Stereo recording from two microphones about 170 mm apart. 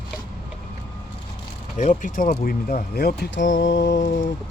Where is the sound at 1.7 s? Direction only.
45° left (ahead or behind).